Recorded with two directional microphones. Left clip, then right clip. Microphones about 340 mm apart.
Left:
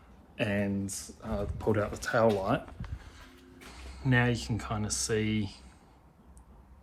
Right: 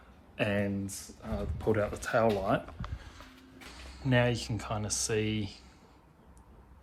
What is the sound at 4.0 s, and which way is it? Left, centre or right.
Speech, centre.